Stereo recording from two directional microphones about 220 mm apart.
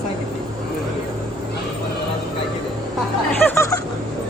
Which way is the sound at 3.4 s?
15° left (ahead or behind).